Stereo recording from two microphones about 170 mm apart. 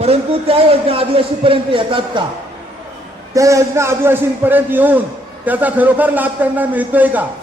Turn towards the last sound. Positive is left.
turn(degrees=-10)  # may be behind; listen again after turning